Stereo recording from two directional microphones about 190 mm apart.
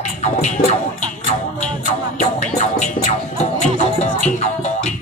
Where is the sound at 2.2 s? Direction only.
40° left (ahead or behind).